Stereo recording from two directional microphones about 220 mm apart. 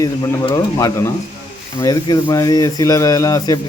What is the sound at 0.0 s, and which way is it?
Speech, 15° left (ahead or behind).